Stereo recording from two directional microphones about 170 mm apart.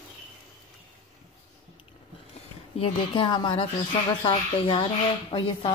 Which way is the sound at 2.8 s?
30° left (ahead or behind).